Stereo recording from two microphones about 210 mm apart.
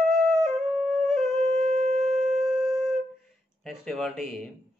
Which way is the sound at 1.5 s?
35° right (ahead or behind).